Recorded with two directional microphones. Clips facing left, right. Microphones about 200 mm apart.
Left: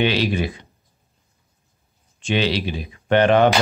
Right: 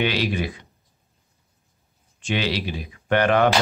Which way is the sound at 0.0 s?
25° left (ahead or behind).